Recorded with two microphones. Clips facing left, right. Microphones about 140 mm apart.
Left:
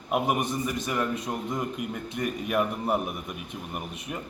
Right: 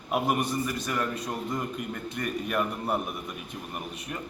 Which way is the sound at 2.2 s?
15° left (ahead or behind).